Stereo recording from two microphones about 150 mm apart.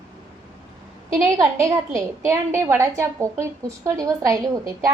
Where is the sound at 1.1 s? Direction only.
20° right (ahead or behind).